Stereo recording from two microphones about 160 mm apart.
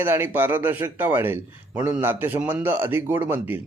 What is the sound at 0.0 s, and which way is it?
A man's voice, 15° right (ahead or behind).